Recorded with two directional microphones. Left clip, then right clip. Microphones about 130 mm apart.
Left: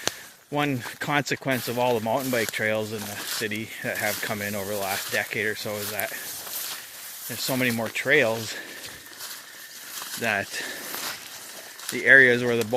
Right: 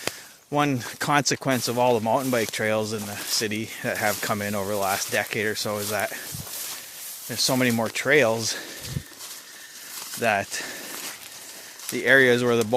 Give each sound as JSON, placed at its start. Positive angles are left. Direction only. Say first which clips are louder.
{"t": 0.5, "sound": "speech", "louder": "right 3 dB", "side_deg": -45}
{"t": 7.3, "sound": "speech", "louder": "right 3 dB", "side_deg": -55}
{"t": 10.2, "sound": "speech", "louder": "right 3 dB", "side_deg": -40}
{"t": 11.9, "sound": "speech", "louder": "left 2 dB", "side_deg": -35}